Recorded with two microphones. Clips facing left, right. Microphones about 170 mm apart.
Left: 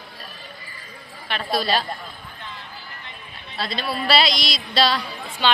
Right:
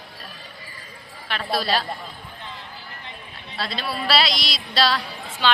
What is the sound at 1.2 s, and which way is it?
Speech, centre (ahead or behind).